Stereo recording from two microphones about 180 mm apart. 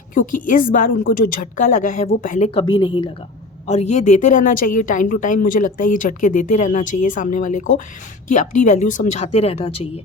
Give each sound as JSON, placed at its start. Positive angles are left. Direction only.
{"t": 0.1, "sound": "a woman's voice", "side_deg": 50}
{"t": 2.5, "sound": "a woman's voice", "side_deg": 30}
{"t": 3.7, "sound": "a woman's voice", "side_deg": 40}